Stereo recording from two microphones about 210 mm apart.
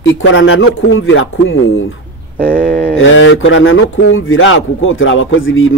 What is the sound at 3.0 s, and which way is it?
Speech, 65° left (ahead or behind).